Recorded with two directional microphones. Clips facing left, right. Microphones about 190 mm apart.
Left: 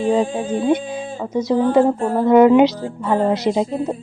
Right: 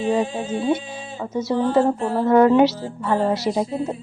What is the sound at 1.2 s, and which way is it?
A woman's voice, 15° left (ahead or behind).